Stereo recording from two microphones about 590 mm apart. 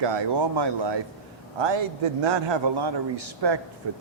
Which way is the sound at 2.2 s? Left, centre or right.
Right.